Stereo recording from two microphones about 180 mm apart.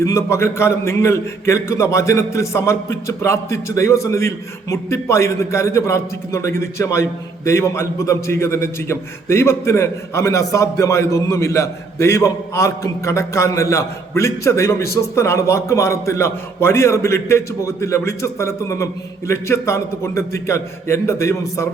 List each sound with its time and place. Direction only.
0.0 s a man's voice: 15° left (ahead or behind)